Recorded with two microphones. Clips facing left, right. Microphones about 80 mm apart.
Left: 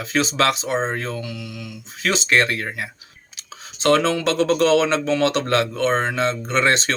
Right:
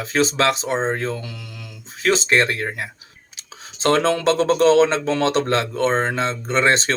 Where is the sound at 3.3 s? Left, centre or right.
Right.